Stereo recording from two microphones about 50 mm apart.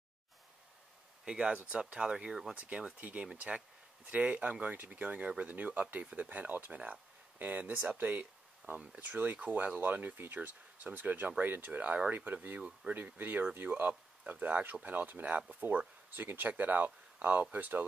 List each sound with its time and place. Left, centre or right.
1.2 s speech: centre
2.5 s speech: right
9.1 s speech: right
12.9 s speech: right